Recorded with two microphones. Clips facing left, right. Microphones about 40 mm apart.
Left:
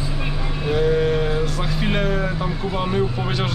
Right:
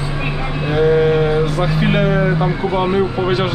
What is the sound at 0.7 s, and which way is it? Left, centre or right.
Sheep, centre.